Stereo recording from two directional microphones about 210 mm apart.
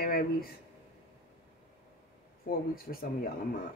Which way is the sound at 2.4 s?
45° left (ahead or behind).